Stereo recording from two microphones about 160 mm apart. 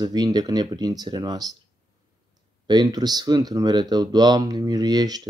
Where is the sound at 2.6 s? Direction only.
25° right (ahead or behind).